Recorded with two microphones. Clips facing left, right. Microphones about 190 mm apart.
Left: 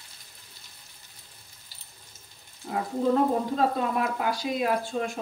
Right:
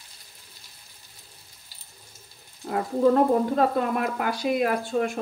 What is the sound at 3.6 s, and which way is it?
Speech, 60° right (ahead or behind).